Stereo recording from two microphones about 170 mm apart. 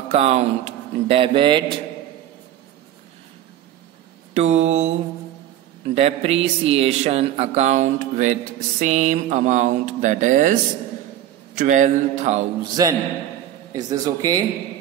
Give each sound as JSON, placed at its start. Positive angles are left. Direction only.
{"t": 0.1, "sound": "mantra", "side_deg": -40}
{"t": 4.3, "sound": "mantra", "side_deg": -40}
{"t": 5.9, "sound": "speech", "side_deg": -35}
{"t": 12.8, "sound": "speech", "side_deg": -20}